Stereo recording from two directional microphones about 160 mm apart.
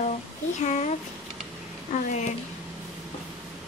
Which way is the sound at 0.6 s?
45° left (ahead or behind).